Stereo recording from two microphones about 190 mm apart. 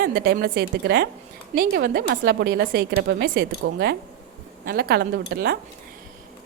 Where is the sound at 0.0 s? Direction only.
55° right (ahead or behind).